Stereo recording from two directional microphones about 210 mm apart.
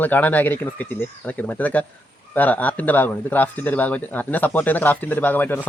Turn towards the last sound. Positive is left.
turn(degrees=10)  # may be behind; listen again after turning